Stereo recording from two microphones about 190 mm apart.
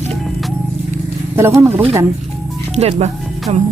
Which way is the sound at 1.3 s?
15° right (ahead or behind).